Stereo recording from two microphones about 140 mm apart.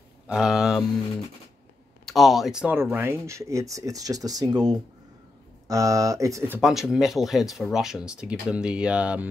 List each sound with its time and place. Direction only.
0.3 s speech: 5° right (ahead or behind)
2.0 s speech: centre (ahead or behind); by 6.6 s 20° right (ahead or behind)
6.6 s speech: centre (ahead or behind)